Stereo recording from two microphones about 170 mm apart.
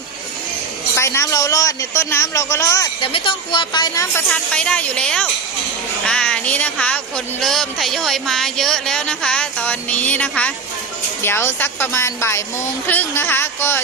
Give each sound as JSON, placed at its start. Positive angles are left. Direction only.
{"t": 0.9, "sound": "speech", "side_deg": 15}
{"t": 3.0, "sound": "a woman's voice", "side_deg": 30}
{"t": 4.3, "sound": "speech", "side_deg": 5}